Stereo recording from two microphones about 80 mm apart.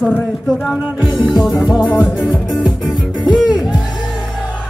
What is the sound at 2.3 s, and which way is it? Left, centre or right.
Music, centre.